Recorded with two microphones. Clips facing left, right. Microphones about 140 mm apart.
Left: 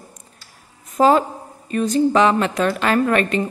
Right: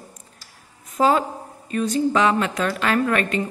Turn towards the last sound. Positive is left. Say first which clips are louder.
# left 3 dB
turn(degrees=30)  # may be behind; listen again after turning